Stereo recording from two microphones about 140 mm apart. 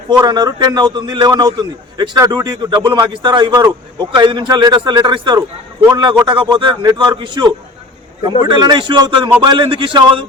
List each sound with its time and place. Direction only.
0.1 s a man's voice: 30° right (ahead or behind)